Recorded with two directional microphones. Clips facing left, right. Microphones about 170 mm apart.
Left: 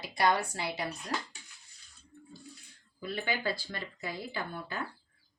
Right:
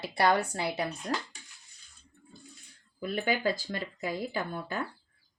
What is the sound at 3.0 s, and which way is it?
Speech, 50° right (ahead or behind).